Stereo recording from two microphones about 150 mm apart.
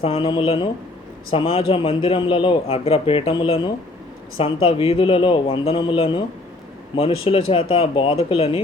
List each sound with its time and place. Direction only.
0.0 s a man's voice: 40° left (ahead or behind)